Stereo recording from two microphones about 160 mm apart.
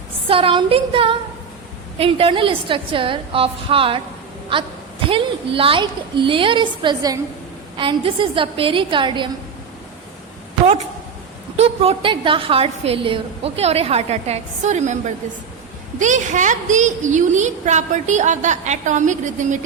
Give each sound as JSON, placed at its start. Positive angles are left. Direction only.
{"t": 0.3, "sound": "a woman's voice", "side_deg": -35}
{"t": 5.0, "sound": "a woman's voice", "side_deg": -35}
{"t": 11.5, "sound": "a woman's voice", "side_deg": -40}